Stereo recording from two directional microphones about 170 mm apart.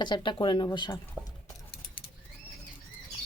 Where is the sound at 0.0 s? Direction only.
25° left (ahead or behind).